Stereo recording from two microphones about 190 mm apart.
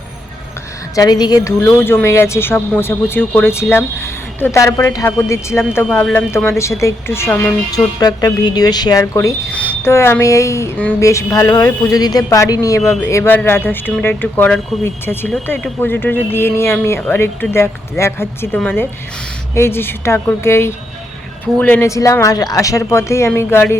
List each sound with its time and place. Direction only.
0.9 s speech: 20° left (ahead or behind)
5.8 s speech: centre (ahead or behind)
6.1 s speech: 15° left (ahead or behind)